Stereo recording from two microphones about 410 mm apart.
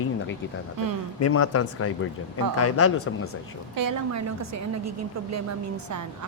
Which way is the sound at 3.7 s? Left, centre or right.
Right.